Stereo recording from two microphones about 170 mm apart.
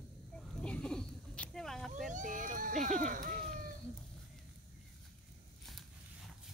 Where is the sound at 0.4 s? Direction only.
5° left (ahead or behind).